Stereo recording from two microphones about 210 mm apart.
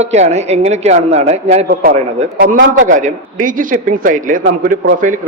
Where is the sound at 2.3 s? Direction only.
45° right (ahead or behind).